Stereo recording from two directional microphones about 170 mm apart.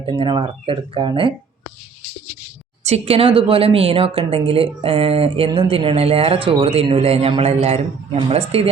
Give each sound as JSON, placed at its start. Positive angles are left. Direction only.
{"t": 0.0, "sound": "speech", "side_deg": -30}
{"t": 2.8, "sound": "speech", "side_deg": -35}